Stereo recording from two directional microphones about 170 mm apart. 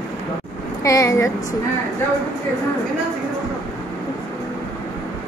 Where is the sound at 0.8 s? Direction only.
20° left (ahead or behind).